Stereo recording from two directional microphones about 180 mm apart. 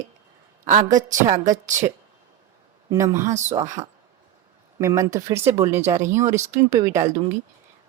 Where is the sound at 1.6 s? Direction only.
45° right (ahead or behind).